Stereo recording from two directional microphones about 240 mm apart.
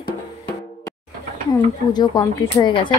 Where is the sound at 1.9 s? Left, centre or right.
Centre.